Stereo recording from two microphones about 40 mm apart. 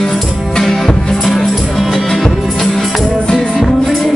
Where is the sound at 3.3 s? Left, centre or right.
Left.